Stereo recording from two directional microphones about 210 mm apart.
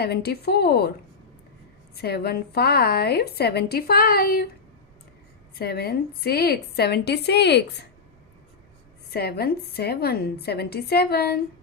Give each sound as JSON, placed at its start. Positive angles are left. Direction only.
{"t": 0.0, "sound": "a woman's voice", "side_deg": 50}
{"t": 2.0, "sound": "a woman's voice", "side_deg": 50}
{"t": 5.5, "sound": "a woman's voice", "side_deg": 50}
{"t": 9.0, "sound": "a woman's voice", "side_deg": 45}